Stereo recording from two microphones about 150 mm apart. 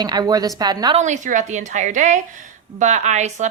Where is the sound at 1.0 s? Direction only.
55° right (ahead or behind).